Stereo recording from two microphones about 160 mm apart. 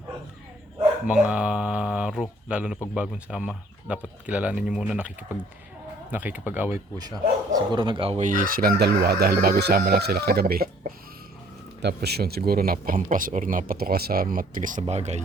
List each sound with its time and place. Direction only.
1.0 s speech: 5° right (ahead or behind)
7.5 s speech: 30° right (ahead or behind)
8.2 s speech: 55° right (ahead or behind)
11.8 s speech: 90° right; by 15.2 s 45° right (ahead or behind)